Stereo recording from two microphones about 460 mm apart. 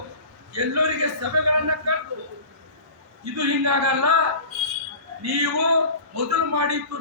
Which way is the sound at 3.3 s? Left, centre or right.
Right.